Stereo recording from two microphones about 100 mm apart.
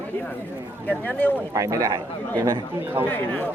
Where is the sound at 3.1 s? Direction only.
15° left (ahead or behind).